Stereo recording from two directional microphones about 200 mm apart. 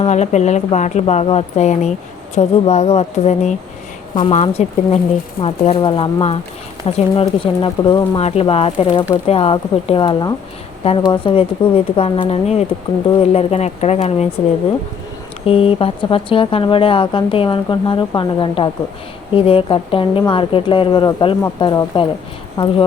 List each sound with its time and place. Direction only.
0.0 s a woman's voice: 35° left (ahead or behind)
15.4 s a woman's voice: 30° left (ahead or behind)